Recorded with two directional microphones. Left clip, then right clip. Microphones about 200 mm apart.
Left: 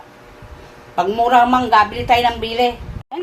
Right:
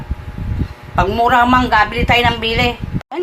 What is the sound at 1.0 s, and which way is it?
A woman's voice, 5° right (ahead or behind).